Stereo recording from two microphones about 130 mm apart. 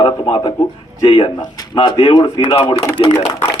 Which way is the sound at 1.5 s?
35° left (ahead or behind).